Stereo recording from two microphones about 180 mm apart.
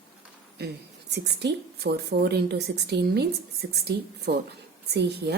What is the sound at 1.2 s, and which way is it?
A woman's voice, 65° right (ahead or behind).